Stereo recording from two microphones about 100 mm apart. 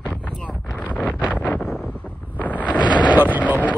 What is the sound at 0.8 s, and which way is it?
Wind noise, 15° left (ahead or behind).